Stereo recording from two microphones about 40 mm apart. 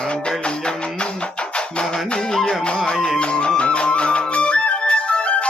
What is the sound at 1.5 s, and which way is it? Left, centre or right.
Music, left.